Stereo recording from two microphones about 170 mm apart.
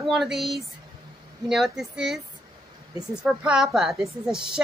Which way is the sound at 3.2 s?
5° right (ahead or behind).